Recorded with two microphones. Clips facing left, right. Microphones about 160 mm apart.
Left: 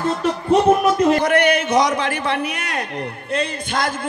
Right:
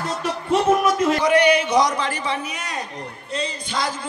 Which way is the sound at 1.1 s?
50° left (ahead or behind).